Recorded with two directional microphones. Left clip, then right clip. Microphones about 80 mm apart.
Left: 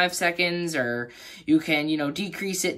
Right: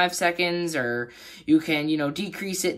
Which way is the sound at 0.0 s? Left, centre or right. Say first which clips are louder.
Even; right.